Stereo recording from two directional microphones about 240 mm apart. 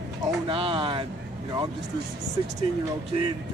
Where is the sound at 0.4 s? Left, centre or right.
Right.